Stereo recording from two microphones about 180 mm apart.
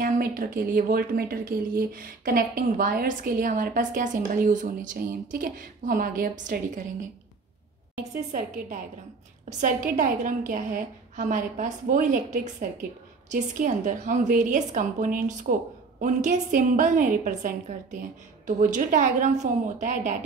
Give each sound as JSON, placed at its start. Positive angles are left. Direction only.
{"t": 0.0, "sound": "a woman's voice", "side_deg": -55}
{"t": 8.0, "sound": "a woman's voice", "side_deg": -45}